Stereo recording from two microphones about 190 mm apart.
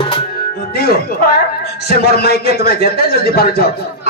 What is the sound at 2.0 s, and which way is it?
A man's voice, 55° left (ahead or behind).